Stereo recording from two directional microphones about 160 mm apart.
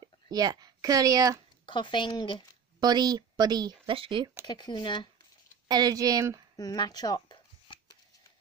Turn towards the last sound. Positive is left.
turn(degrees=25)  # may be behind; listen again after turning